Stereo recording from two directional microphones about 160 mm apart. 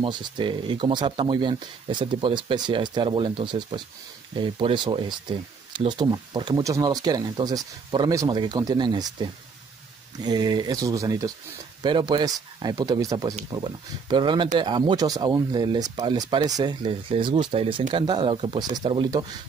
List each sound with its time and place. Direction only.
0.0 s speech: 30° right (ahead or behind)